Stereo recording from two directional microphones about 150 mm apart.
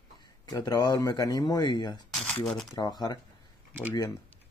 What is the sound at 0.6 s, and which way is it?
Speech, 25° left (ahead or behind).